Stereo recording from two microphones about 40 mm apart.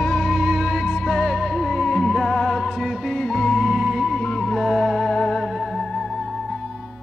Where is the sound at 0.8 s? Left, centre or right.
Centre.